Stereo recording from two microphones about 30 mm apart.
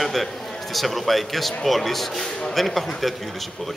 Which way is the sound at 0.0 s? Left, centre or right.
Centre.